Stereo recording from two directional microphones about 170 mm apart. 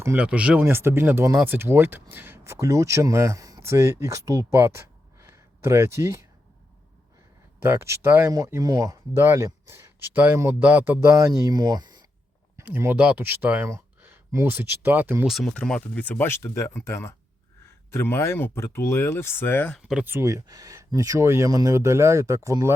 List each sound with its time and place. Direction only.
0.0 s speech: 10° right (ahead or behind)
7.6 s speech: 15° right (ahead or behind)
15.3 s speech: 5° left (ahead or behind)
19.9 s speech: 10° right (ahead or behind)